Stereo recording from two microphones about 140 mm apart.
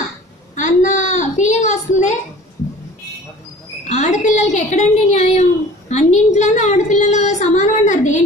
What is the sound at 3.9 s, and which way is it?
A woman's voice, 60° left (ahead or behind).